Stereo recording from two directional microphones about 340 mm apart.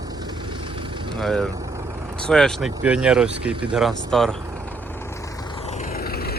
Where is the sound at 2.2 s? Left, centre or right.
Centre.